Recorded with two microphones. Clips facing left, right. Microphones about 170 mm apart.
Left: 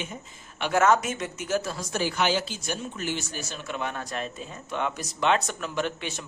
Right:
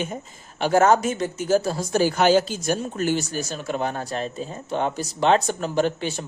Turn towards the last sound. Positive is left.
turn(degrees=-35)  # may be behind; listen again after turning